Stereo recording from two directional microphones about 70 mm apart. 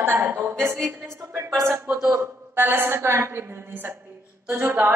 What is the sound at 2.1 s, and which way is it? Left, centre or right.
A woman's voice, right.